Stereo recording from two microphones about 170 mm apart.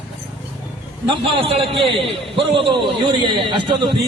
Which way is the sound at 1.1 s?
30° right (ahead or behind).